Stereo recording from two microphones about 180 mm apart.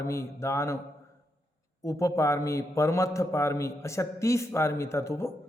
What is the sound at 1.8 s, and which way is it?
A man's voice, 15° left (ahead or behind).